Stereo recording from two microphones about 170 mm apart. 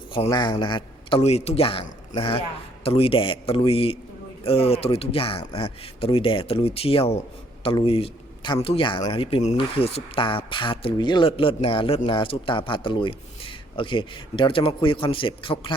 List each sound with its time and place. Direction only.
0.3 s speech: 25° left (ahead or behind)
1.2 s speech: 40° left (ahead or behind)